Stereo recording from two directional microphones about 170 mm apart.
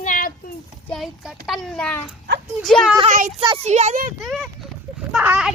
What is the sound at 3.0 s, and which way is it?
A child's voice, 50° right (ahead or behind).